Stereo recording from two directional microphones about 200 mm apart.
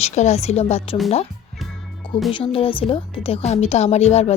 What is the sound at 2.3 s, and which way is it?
Speech, 25° left (ahead or behind).